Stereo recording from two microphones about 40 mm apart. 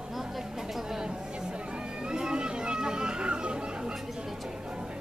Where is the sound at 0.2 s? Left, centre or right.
Centre.